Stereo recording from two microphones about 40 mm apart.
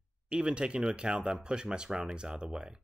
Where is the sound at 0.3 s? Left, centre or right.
Right.